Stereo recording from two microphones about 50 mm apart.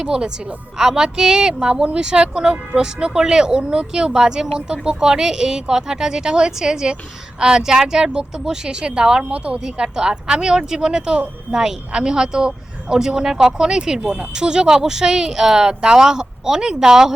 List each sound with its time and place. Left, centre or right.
0.0 s a woman's voice: centre
9.6 s a woman's voice: centre